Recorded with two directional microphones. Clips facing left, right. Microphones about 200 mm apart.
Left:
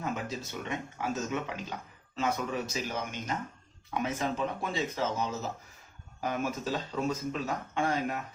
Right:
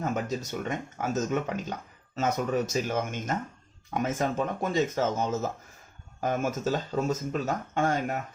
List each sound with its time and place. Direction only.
0.0 s speech: 45° right (ahead or behind)